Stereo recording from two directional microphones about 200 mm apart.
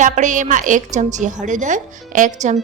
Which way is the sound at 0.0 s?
40° right (ahead or behind).